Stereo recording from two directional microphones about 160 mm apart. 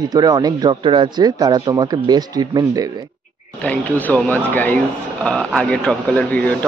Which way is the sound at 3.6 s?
10° left (ahead or behind).